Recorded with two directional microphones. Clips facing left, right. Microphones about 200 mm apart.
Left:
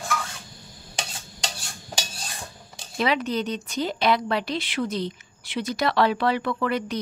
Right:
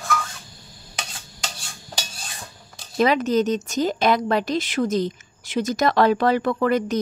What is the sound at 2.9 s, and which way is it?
Speech, 45° right (ahead or behind).